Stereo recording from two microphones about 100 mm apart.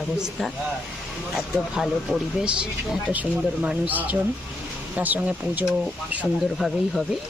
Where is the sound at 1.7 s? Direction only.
5° right (ahead or behind).